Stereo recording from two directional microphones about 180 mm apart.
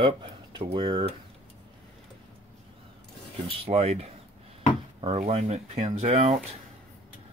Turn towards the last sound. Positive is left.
turn(degrees=-35)  # may be behind; listen again after turning